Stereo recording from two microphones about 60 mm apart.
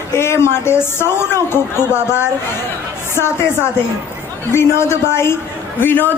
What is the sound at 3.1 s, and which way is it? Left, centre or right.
Speech, left.